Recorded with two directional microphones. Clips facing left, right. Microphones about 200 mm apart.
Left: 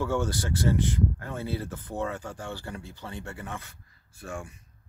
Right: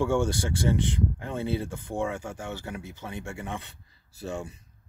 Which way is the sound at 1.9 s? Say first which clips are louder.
Right 2 dB; 10° right (ahead or behind).